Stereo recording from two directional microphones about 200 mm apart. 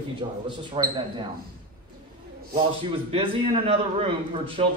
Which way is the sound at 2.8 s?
30° right (ahead or behind).